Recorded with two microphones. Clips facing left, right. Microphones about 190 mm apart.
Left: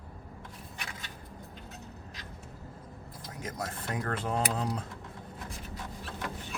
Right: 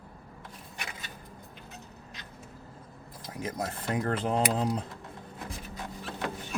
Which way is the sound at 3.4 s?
15° right (ahead or behind).